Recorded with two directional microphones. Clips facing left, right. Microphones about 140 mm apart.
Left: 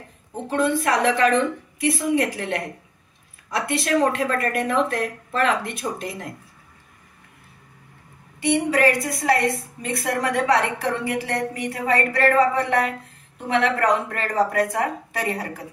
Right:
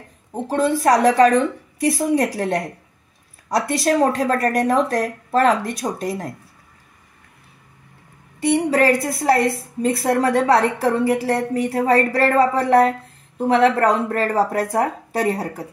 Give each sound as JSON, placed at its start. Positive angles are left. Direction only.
{"t": 0.5, "sound": "a woman's voice", "side_deg": -35}
{"t": 8.6, "sound": "a woman's voice", "side_deg": -35}